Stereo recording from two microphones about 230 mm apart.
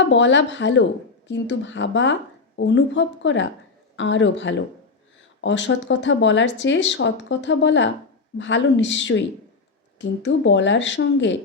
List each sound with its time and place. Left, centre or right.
0.1 s speech: left